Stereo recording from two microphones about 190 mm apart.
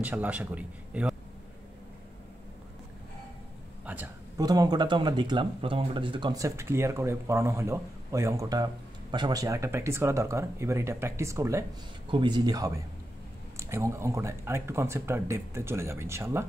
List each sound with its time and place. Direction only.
0.0 s speech: 10° right (ahead or behind)
3.8 s speech: 10° right (ahead or behind)
4.4 s speech: 20° right (ahead or behind)